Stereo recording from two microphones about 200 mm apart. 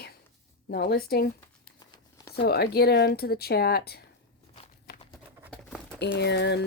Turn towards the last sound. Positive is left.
turn(degrees=55)  # may be behind; listen again after turning